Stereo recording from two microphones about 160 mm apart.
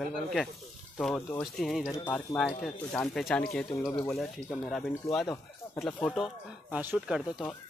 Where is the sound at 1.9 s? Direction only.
15° left (ahead or behind).